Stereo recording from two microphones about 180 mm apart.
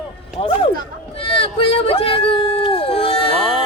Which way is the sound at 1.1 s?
30° left (ahead or behind).